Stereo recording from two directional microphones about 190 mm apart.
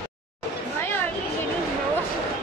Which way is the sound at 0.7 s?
10° left (ahead or behind).